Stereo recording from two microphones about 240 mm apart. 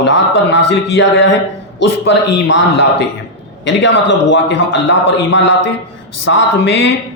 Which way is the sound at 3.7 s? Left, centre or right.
Left.